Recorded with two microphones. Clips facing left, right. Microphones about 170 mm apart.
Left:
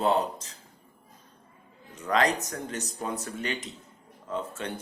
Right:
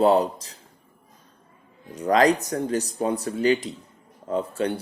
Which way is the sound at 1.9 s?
35° right (ahead or behind).